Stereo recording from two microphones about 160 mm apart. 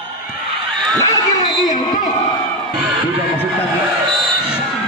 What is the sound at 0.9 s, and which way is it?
Crowd, 25° left (ahead or behind).